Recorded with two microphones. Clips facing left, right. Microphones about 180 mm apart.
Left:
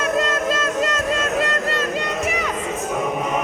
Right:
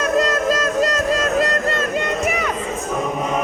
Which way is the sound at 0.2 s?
40° right (ahead or behind).